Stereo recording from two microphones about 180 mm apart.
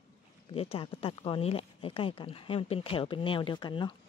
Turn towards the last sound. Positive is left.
turn(degrees=25)  # may be behind; listen again after turning